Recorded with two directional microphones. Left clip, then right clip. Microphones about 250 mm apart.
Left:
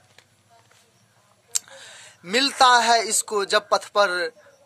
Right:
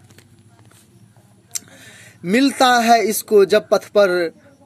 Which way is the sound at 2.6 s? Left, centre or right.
Centre.